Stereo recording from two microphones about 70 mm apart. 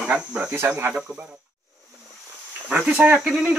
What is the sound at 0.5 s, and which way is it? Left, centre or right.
Speech, right.